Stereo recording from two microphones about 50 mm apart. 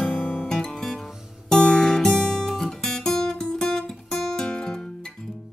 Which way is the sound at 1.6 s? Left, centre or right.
Centre.